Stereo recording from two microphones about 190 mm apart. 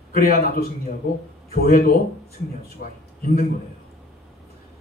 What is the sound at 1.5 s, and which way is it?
A man's voice, 50° left (ahead or behind).